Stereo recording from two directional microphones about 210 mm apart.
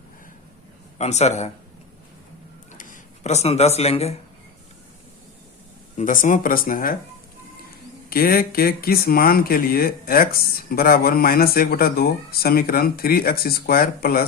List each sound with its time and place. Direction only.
0.9 s speech: 30° left (ahead or behind)
2.7 s speech: 40° left (ahead or behind)
6.0 s speech: 40° left (ahead or behind)
8.1 s speech: 45° left (ahead or behind)